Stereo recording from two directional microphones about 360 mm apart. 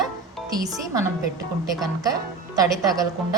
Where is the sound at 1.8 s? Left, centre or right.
Centre.